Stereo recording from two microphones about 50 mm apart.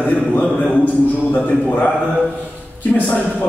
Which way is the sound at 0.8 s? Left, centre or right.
Left.